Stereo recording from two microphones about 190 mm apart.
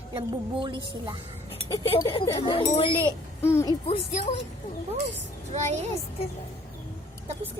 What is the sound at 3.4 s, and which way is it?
Speech, 15° left (ahead or behind).